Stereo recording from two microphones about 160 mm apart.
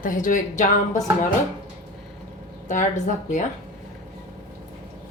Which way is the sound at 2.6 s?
50° left (ahead or behind).